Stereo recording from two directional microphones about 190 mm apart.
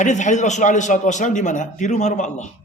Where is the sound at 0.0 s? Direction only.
40° left (ahead or behind).